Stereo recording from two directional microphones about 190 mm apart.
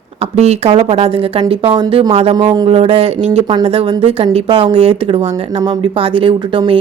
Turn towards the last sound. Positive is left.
turn(degrees=-25)  # may be behind; listen again after turning